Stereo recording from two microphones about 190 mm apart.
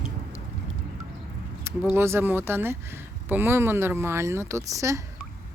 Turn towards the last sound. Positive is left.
turn(degrees=-15)  # may be behind; listen again after turning